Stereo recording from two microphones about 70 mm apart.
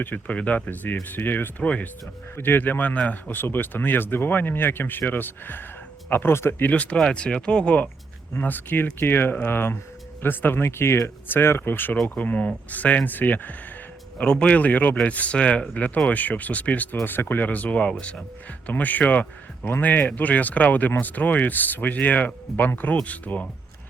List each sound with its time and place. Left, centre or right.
0.0 s speech: left
2.3 s speech: left
6.9 s speech: centre
8.4 s speech: left